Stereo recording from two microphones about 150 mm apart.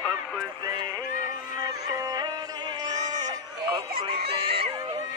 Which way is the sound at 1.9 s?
25° right (ahead or behind).